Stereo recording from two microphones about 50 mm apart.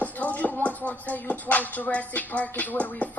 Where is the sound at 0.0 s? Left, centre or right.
Left.